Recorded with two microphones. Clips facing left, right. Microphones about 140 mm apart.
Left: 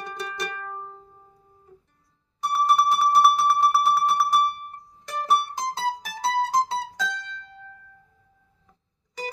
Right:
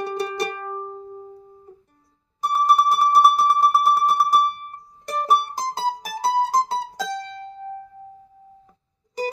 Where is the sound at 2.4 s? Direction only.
40° right (ahead or behind).